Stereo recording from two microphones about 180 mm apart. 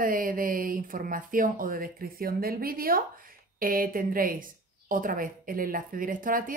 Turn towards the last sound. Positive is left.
turn(degrees=-50)  # may be behind; listen again after turning